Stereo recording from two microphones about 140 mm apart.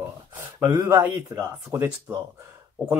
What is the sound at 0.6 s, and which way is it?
Speech, 20° right (ahead or behind).